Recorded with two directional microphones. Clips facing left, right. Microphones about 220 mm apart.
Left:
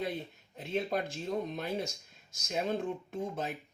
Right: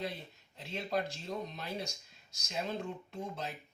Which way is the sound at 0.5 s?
50° left (ahead or behind).